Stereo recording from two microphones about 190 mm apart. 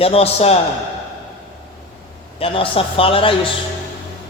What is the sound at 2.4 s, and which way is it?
Speech, 30° left (ahead or behind).